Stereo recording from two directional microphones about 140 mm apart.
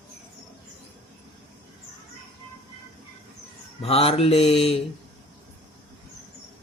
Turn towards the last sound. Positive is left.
turn(degrees=45)  # may be behind; listen again after turning